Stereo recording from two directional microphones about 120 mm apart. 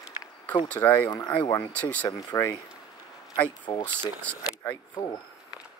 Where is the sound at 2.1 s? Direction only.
30° left (ahead or behind).